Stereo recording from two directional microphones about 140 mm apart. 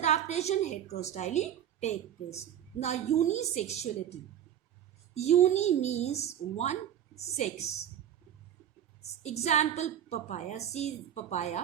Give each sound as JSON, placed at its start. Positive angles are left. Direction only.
{"t": 0.0, "sound": "a woman's voice", "side_deg": 55}
{"t": 5.1, "sound": "a woman's voice", "side_deg": 50}
{"t": 9.4, "sound": "a woman's voice", "side_deg": 55}